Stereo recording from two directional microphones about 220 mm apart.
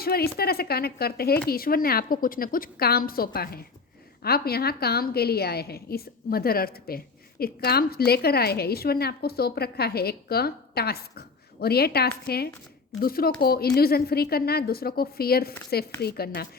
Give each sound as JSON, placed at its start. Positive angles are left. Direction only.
{"t": 0.0, "sound": "a woman's voice", "side_deg": 45}